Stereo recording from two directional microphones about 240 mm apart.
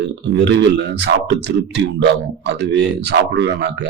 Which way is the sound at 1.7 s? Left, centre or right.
Right.